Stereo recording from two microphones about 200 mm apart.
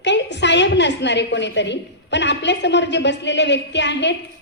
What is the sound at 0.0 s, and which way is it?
A woman's voice, 60° left (ahead or behind).